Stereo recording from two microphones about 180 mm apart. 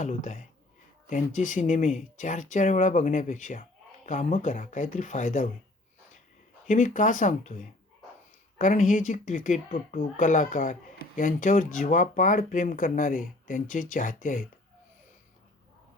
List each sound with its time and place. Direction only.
0.0 s speech: 40° left (ahead or behind)
6.7 s speech: 45° left (ahead or behind)